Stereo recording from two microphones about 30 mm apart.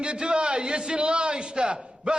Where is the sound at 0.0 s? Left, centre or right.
Right.